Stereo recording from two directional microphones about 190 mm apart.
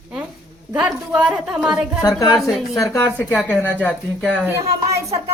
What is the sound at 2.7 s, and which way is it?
Speech, 15° left (ahead or behind).